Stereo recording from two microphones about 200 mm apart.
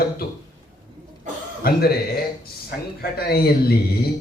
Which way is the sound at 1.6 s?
50° left (ahead or behind).